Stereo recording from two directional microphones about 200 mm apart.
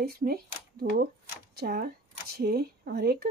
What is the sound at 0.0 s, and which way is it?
Speech, 45° right (ahead or behind).